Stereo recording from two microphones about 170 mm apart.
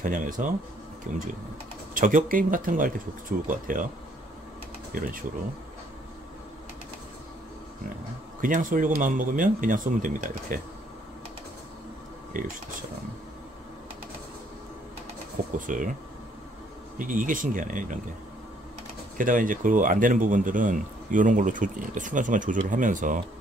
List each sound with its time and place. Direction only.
0.0 s speech: 50° right (ahead or behind)
4.9 s speech: 55° right (ahead or behind)
8.4 s speech: 50° right (ahead or behind)
12.4 s speech: 50° right (ahead or behind)
15.5 s speech: 50° right (ahead or behind)
17.0 s speech: 50° right (ahead or behind)
19.1 s speech: 50° right (ahead or behind)